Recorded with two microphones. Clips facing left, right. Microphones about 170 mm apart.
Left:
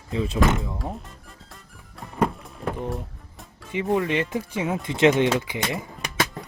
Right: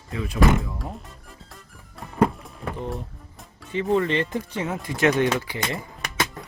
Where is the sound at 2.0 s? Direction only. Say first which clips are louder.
Right 3 dB; centre (ahead or behind).